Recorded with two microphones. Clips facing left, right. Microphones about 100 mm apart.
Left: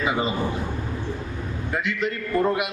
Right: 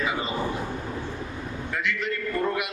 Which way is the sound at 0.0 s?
20° left (ahead or behind).